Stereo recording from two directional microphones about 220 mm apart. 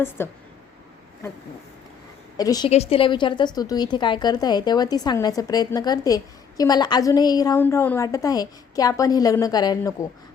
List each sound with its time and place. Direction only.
0.2 s a woman's voice: 10° left (ahead or behind)
2.4 s a woman's voice: 15° left (ahead or behind)
2.6 s a woman's voice: 30° left (ahead or behind)